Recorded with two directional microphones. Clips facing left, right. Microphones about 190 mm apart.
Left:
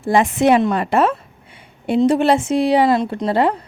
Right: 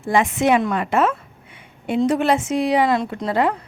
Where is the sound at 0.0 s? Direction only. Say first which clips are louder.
Left 3 dB; 35° left (ahead or behind).